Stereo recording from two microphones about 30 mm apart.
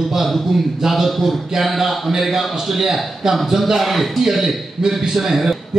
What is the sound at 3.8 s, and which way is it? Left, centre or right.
A man's voice, centre.